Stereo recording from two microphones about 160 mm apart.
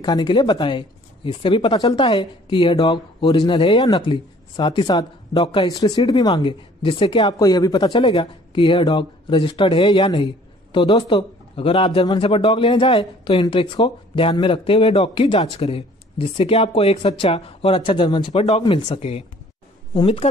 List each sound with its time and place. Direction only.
0.0 s a man's voice: 25° left (ahead or behind)
5.4 s a man's voice: 40° left (ahead or behind)
5.7 s a man's voice: 25° left (ahead or behind)